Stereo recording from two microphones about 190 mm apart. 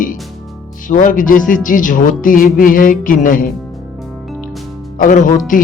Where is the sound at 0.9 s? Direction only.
45° left (ahead or behind).